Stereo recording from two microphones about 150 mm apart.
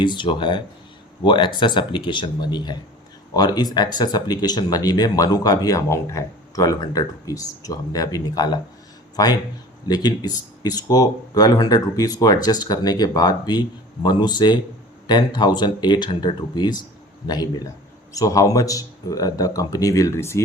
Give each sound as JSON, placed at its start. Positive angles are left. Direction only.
{"t": 0.0, "sound": "speech", "side_deg": 30}